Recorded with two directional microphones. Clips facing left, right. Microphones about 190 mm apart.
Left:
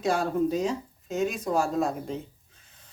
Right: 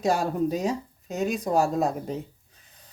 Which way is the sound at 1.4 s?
40° right (ahead or behind).